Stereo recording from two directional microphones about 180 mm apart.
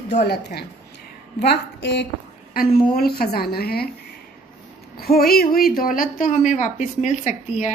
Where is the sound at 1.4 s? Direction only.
70° left (ahead or behind).